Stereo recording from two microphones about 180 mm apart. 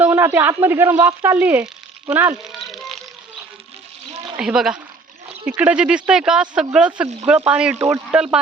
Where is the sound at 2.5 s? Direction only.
Centre (ahead or behind).